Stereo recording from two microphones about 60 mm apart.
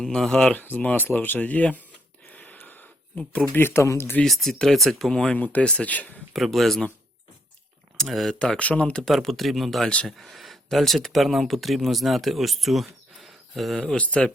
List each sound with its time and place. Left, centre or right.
0.0 s speech: centre
0.5 s speech: left
2.3 s a sound: left
3.5 s speech: left
4.2 s speech: centre
5.4 s speech: left
6.3 s speech: centre
7.9 s speech: centre
8.4 s speech: centre
9.0 s speech: centre
9.8 s speech: centre
10.1 s speech: centre
13.8 s speech: centre